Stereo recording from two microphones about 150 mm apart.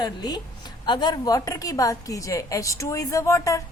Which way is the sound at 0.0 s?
25° left (ahead or behind).